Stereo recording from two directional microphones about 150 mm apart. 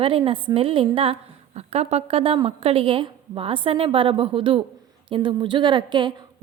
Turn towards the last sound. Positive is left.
turn(degrees=-30)  # may be behind; listen again after turning